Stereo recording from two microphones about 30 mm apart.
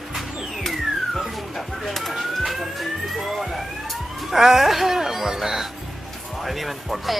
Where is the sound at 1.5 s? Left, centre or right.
Centre.